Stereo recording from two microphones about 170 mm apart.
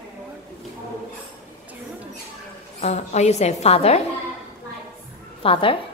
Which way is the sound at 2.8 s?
40° left (ahead or behind).